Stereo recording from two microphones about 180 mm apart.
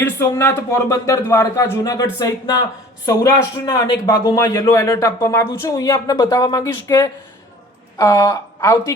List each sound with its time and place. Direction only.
0.0 s a man's voice: 10° left (ahead or behind)